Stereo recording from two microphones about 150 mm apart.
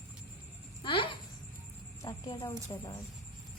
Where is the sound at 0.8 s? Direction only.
35° left (ahead or behind).